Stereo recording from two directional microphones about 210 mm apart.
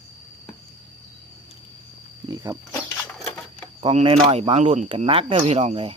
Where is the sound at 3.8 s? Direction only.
25° right (ahead or behind).